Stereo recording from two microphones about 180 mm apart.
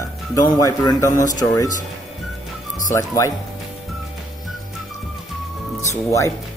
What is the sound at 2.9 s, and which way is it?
Speech, 15° left (ahead or behind).